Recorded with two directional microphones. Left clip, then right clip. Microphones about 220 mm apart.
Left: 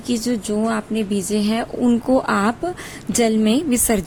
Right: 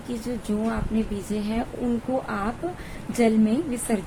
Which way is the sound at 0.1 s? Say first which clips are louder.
Left 8 dB; 40° left (ahead or behind).